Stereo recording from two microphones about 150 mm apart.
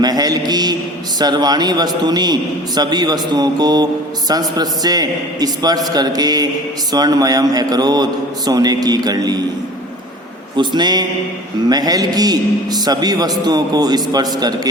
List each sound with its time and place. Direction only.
0.0 s a sound: 25° right (ahead or behind)
1.2 s a man's voice: 25° right (ahead or behind)
10.6 s a man's voice: 30° right (ahead or behind)